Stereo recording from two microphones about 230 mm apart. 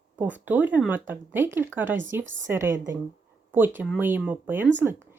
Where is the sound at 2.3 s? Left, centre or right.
Right.